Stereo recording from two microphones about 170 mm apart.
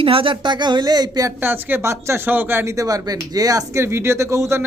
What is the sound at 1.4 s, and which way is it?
Speech, 10° right (ahead or behind).